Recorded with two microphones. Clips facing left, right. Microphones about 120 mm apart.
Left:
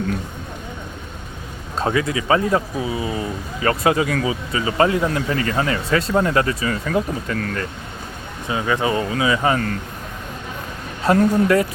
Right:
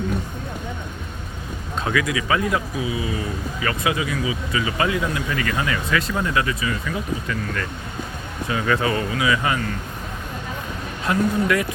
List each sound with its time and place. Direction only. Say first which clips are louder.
1.8 s speech: left 3 dB; 30° left (ahead or behind); by 4.4 s 50° left (ahead or behind)
4.5 s speech: left 5 dB; 35° left (ahead or behind)
8.4 s speech: left 1 dB; 20° left (ahead or behind)
11.1 s speech: left 5 dB; 35° left (ahead or behind)